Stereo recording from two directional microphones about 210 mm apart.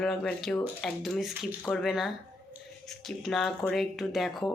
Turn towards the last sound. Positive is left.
turn(degrees=0)  # may be behind; listen again after turning